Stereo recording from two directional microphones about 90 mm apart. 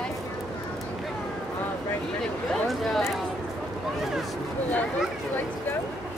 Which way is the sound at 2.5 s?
Centre (ahead or behind).